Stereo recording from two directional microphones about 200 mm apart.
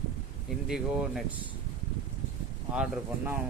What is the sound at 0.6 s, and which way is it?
Speech, centre (ahead or behind).